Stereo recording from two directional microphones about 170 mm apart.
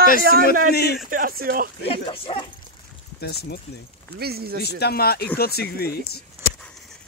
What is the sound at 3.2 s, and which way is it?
Speech, 65° left (ahead or behind).